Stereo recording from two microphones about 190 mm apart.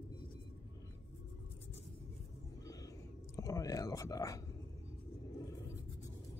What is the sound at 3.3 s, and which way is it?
Whispering, 15° left (ahead or behind).